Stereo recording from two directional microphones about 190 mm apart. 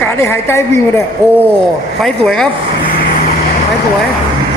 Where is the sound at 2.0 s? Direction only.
5° left (ahead or behind).